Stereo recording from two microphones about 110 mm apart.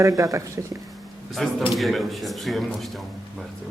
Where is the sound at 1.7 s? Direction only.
Centre (ahead or behind).